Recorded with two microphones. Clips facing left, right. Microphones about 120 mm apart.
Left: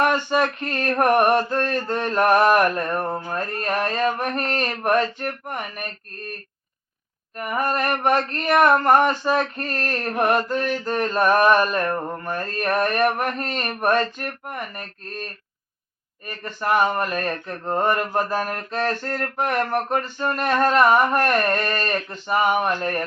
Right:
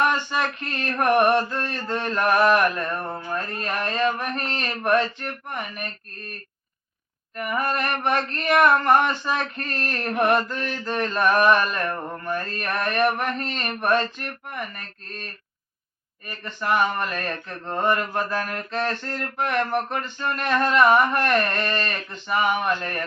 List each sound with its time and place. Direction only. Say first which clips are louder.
0.0 s mantra: left 3 dB; 45° left (ahead or behind)
3.1 s mantra: left 3 dB; 35° left (ahead or behind)
7.3 s mantra: left 2 dB; 40° left (ahead or behind)
16.2 s mantra: left 2 dB; 40° left (ahead or behind)